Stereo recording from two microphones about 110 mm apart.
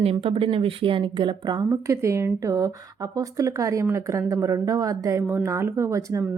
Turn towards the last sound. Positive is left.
turn(degrees=-30)  # may be behind; listen again after turning